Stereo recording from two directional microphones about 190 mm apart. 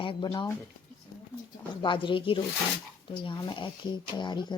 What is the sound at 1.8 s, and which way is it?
Speech, 25° left (ahead or behind).